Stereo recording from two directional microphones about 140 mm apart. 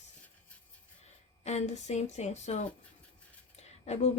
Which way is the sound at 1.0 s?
50° left (ahead or behind).